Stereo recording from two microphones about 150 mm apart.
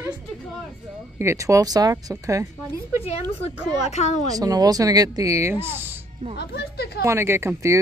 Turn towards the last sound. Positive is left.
turn(degrees=-15)  # may be behind; listen again after turning